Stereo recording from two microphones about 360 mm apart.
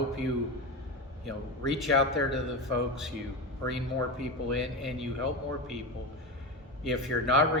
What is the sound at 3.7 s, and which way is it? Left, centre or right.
Speech, centre.